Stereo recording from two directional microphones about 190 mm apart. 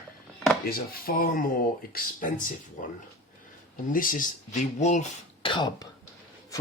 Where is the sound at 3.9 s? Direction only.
45° left (ahead or behind).